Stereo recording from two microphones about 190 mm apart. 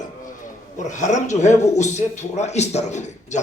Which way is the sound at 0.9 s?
40° left (ahead or behind).